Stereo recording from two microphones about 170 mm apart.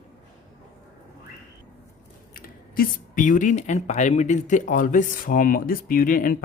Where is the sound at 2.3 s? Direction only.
60° left (ahead or behind).